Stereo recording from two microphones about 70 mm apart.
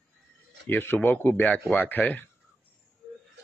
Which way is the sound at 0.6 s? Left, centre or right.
Left.